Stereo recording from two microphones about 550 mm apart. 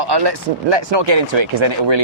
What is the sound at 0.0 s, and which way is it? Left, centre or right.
Speech, right.